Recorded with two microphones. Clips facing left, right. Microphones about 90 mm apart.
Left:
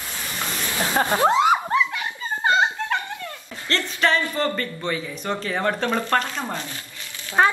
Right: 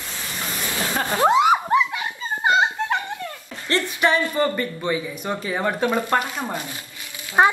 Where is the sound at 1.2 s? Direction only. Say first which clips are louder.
Right 3 dB; 15° right (ahead or behind).